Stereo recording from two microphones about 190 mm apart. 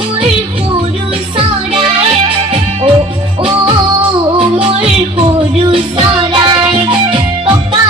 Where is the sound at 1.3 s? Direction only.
30° right (ahead or behind).